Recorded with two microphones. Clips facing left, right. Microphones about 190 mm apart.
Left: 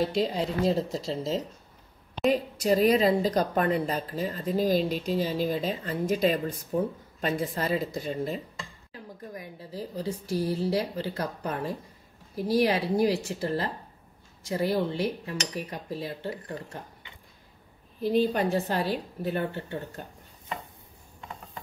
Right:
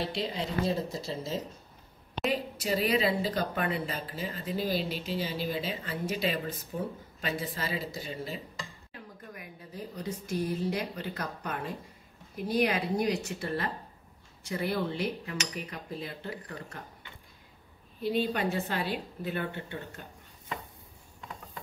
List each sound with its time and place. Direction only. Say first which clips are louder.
0.0 s a woman's voice: left 7 dB; 45° left (ahead or behind)
0.9 s speech: left 5 dB; 90° left
2.6 s a woman's voice: left 7 dB; 40° left (ahead or behind)
9.3 s speech: left 6 dB; 30° left (ahead or behind)
18.0 s speech: left 5 dB; 40° left (ahead or behind)